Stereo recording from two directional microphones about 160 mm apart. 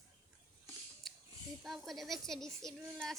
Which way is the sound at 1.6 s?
Centre (ahead or behind).